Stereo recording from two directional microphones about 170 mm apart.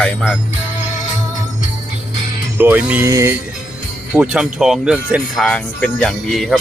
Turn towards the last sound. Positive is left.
turn(degrees=0)  # may be behind; listen again after turning